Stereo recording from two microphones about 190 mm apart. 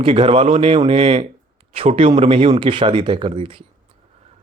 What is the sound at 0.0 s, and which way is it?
A man's voice, 30° right (ahead or behind).